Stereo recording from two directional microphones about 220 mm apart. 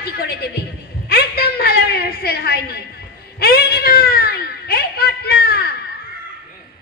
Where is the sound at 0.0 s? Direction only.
45° left (ahead or behind).